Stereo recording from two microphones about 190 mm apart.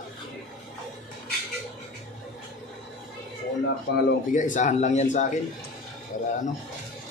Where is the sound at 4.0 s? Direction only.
50° left (ahead or behind).